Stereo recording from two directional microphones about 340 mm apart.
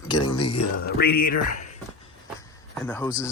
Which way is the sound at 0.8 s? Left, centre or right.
Left.